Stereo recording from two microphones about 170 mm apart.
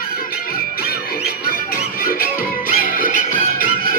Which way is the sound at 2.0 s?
60° left (ahead or behind).